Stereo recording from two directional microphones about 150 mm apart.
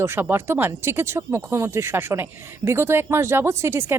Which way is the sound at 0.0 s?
15° right (ahead or behind).